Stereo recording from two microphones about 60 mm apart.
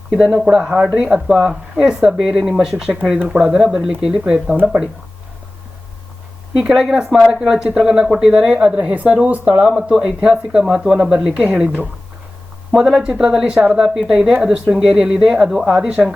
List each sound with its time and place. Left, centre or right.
0.1 s a woman's voice: centre
6.6 s a woman's voice: centre
12.7 s a woman's voice: centre